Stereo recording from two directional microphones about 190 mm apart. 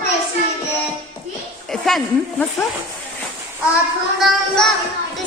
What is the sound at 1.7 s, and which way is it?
Speech, centre (ahead or behind).